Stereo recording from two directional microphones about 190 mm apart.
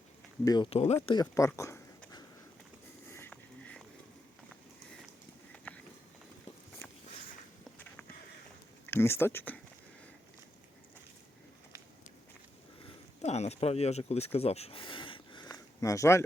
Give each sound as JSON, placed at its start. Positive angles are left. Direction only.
{"t": 0.4, "sound": "speech", "side_deg": 20}
{"t": 0.7, "sound": "speech", "side_deg": 35}
{"t": 1.0, "sound": "speech", "side_deg": 20}
{"t": 3.1, "sound": "a sound", "side_deg": 10}
{"t": 5.5, "sound": "horse", "side_deg": 5}
{"t": 7.6, "sound": "a sound", "side_deg": 5}
{"t": 8.9, "sound": "speech", "side_deg": 10}
{"t": 13.2, "sound": "speech", "side_deg": 35}